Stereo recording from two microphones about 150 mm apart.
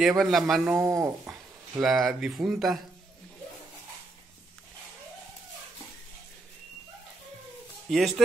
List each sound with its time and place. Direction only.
0.2 s speech: centre (ahead or behind)
0.7 s speech: 15° right (ahead or behind)
1.8 s speech: centre (ahead or behind)
7.9 s speech: centre (ahead or behind)